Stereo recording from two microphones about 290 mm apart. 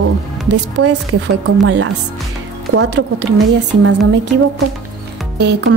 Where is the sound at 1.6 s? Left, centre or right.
Right.